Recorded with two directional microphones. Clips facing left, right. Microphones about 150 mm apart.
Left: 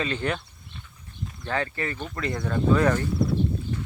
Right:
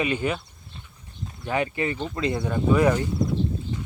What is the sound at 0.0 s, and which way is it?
Speech, 10° right (ahead or behind).